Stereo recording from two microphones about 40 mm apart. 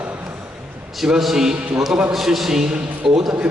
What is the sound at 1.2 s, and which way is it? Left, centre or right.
A man's voice, centre.